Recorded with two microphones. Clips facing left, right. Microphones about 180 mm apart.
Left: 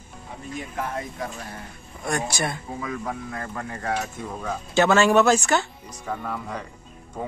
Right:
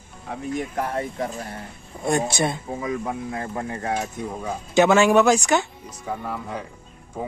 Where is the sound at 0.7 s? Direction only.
35° right (ahead or behind); by 6.1 s 15° right (ahead or behind).